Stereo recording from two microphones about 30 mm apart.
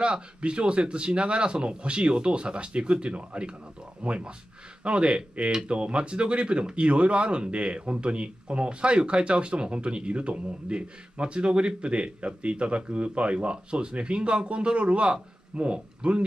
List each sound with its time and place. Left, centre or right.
0.0 s speech: right